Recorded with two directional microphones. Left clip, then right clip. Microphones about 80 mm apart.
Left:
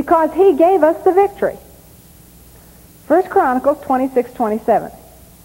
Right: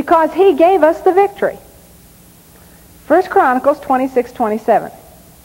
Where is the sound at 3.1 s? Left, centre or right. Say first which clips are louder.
Right 2 dB; centre.